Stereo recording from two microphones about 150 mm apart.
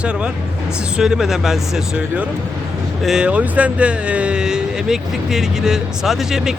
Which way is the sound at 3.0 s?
5° right (ahead or behind).